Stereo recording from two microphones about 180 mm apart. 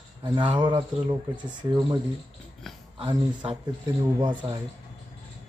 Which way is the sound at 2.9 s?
30° right (ahead or behind).